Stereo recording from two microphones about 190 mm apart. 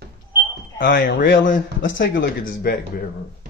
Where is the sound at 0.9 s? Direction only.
55° left (ahead or behind).